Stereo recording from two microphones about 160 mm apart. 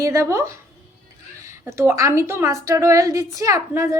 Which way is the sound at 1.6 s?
15° right (ahead or behind).